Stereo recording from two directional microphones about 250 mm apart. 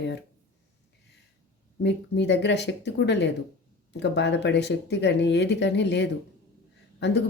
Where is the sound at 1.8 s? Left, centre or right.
Left.